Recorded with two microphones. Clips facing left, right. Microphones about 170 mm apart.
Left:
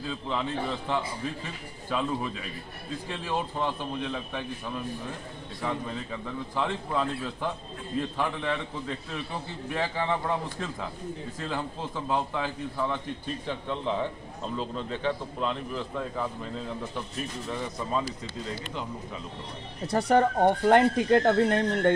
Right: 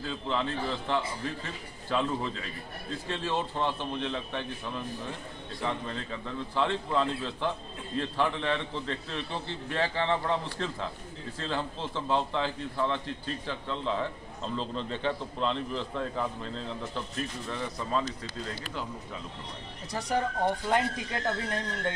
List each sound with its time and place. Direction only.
0.1 s a man's voice: 5° left (ahead or behind)
5.6 s a man's voice: 10° left (ahead or behind)
19.9 s speech: 60° left (ahead or behind)